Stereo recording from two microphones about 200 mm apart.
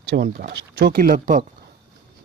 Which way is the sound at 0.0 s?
55° right (ahead or behind).